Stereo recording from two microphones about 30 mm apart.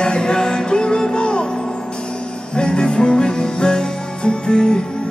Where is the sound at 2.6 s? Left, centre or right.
Left.